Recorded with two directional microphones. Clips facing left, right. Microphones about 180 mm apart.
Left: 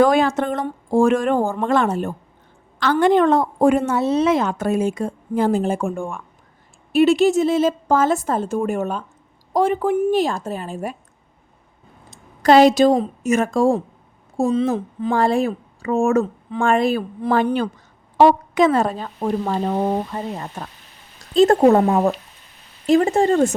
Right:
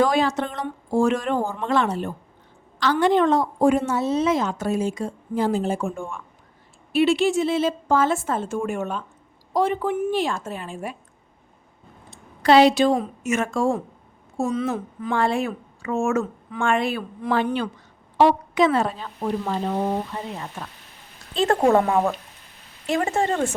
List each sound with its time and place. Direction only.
0.0 s a woman's voice: 55° left (ahead or behind)
6.9 s a woman's voice: 45° left (ahead or behind)
12.1 s a woman's voice: 45° left (ahead or behind)